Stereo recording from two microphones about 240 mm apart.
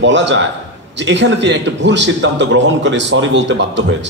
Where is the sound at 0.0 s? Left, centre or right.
Right.